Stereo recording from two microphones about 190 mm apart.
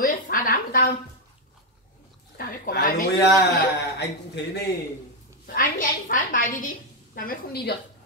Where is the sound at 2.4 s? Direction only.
50° left (ahead or behind).